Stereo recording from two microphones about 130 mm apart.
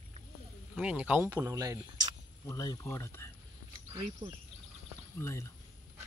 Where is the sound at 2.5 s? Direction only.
25° left (ahead or behind).